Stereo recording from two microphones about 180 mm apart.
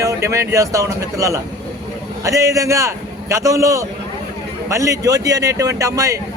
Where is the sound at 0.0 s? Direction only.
15° right (ahead or behind).